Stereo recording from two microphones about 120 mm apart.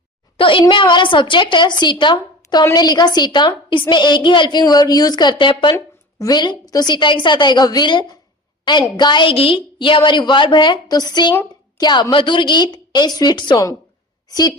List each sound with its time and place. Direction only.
0.3 s a woman's voice: 45° left (ahead or behind)
5.7 s a woman's voice: 30° left (ahead or behind)